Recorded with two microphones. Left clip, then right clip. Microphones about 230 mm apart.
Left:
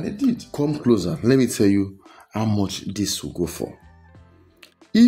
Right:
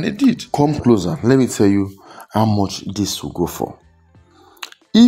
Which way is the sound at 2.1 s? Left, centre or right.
Centre.